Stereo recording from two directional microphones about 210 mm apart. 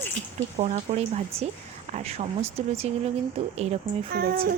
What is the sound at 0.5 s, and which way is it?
A woman's voice, 30° right (ahead or behind).